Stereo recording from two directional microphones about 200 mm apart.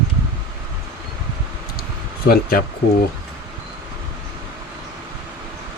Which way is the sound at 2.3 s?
50° left (ahead or behind).